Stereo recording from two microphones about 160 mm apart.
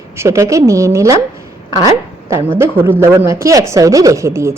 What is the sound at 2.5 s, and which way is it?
A woman's voice, 15° right (ahead or behind).